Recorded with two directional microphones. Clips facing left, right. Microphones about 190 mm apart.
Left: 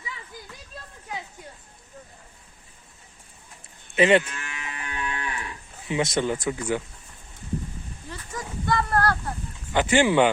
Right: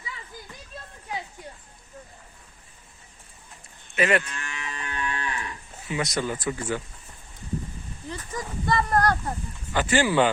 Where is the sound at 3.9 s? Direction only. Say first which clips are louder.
Left 5 dB; 25° left (ahead or behind).